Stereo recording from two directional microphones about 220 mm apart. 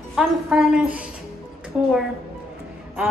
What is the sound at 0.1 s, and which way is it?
Speech, centre (ahead or behind).